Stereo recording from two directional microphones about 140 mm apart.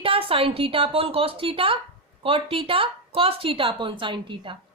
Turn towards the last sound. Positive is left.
turn(degrees=-35)  # may be behind; listen again after turning